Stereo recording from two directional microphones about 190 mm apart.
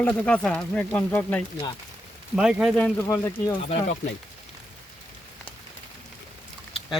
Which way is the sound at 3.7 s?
35° left (ahead or behind).